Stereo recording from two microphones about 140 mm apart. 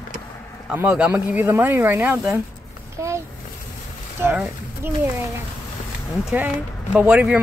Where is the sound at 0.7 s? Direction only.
10° right (ahead or behind).